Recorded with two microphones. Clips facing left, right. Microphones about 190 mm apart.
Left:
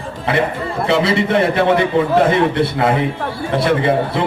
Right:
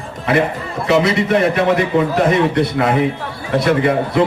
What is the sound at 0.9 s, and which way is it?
A man's voice, 30° left (ahead or behind).